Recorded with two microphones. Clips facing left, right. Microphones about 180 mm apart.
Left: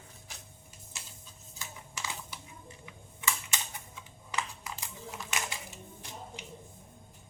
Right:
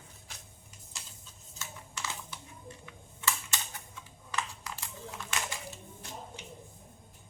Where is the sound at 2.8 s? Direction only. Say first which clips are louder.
Even; 15° left (ahead or behind).